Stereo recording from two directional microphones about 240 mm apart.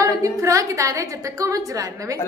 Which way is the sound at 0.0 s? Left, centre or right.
Centre.